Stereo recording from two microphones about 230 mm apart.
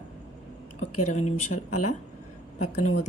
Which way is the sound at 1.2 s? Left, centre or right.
Left.